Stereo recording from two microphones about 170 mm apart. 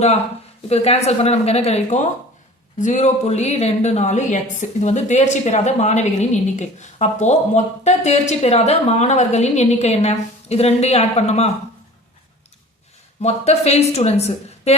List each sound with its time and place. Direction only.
0.7 s a woman's voice: 40° left (ahead or behind)
13.2 s a woman's voice: 40° left (ahead or behind)